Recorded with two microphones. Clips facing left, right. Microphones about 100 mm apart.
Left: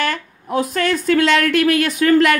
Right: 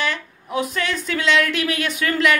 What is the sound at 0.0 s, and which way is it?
A woman's voice, 45° left (ahead or behind).